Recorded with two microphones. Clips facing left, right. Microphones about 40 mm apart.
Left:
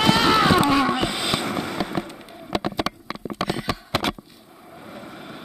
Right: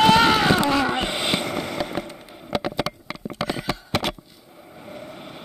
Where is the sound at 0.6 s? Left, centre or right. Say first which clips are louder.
Left 2 dB; centre.